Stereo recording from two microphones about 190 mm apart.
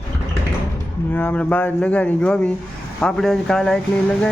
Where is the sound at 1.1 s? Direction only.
10° left (ahead or behind).